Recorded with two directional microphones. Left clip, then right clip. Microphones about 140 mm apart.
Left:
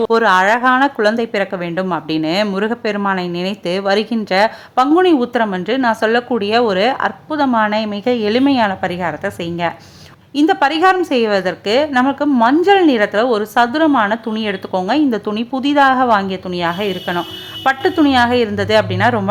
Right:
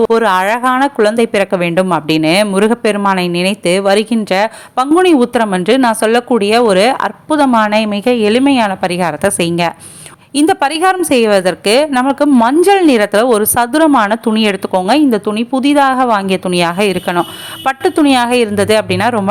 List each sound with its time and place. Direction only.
0.0 s a woman's voice: 25° right (ahead or behind)
8.8 s a woman's voice: 40° right (ahead or behind)
16.5 s a woman's voice: 40° right (ahead or behind)
17.7 s a woman's voice: 35° right (ahead or behind)